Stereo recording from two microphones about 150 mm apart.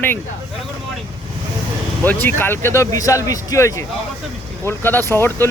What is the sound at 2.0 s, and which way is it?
Speech, 10° left (ahead or behind).